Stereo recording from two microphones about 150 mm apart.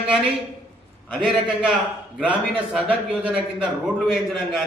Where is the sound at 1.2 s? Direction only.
5° right (ahead or behind).